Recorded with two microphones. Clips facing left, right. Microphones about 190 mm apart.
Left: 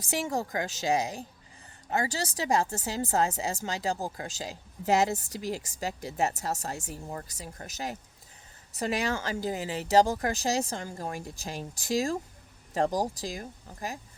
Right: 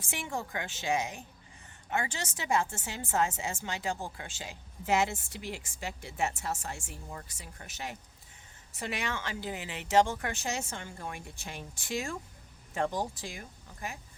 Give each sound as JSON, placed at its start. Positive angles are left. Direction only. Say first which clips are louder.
{"t": 0.0, "sound": "speech", "louder": "left 7 dB", "side_deg": 40}